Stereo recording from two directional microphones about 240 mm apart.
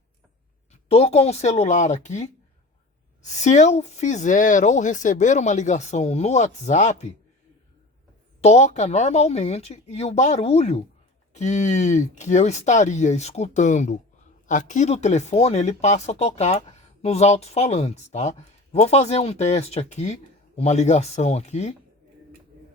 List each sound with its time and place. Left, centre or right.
0.7 s speech: left
3.3 s speech: left
8.4 s speech: left